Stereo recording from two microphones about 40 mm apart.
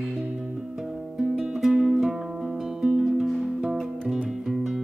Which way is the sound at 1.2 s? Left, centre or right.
Centre.